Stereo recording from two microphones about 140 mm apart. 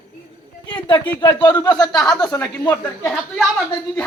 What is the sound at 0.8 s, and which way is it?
Speech, 35° left (ahead or behind).